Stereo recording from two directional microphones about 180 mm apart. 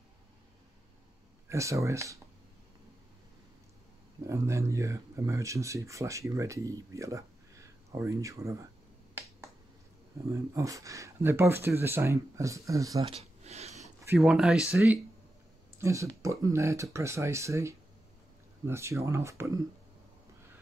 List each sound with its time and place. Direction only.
1.5 s speech: 15° right (ahead or behind)
4.3 s speech: 15° right (ahead or behind)
10.3 s speech: 15° right (ahead or behind)
13.1 s a sound: 35° right (ahead or behind)
14.0 s speech: 5° right (ahead or behind)